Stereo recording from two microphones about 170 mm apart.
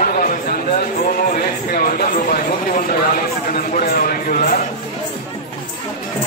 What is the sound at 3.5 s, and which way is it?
A man's voice, 60° left (ahead or behind).